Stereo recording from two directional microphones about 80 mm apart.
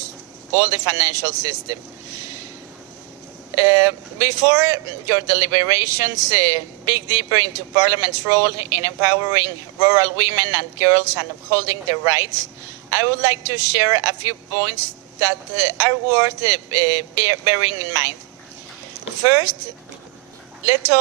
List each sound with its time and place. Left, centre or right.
0.5 s speech: right
3.5 s speech: right
19.3 s speech: right
20.7 s speech: right